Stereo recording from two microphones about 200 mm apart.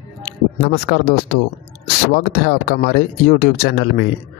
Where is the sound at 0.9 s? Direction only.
55° left (ahead or behind).